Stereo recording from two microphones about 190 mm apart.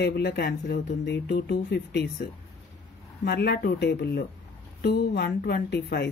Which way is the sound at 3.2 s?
60° left (ahead or behind).